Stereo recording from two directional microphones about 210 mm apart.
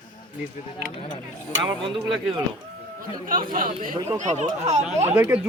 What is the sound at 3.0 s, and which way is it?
Speech, 40° right (ahead or behind).